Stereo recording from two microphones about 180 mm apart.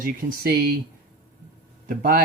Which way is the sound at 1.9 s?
50° right (ahead or behind).